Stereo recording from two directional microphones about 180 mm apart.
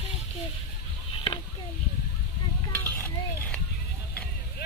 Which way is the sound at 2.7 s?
10° left (ahead or behind).